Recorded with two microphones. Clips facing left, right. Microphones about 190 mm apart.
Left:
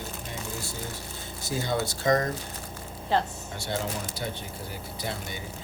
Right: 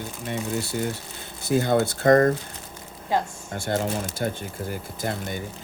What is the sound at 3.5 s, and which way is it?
Speech, 50° right (ahead or behind).